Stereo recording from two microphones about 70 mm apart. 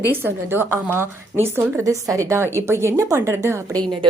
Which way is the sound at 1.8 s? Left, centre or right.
Right.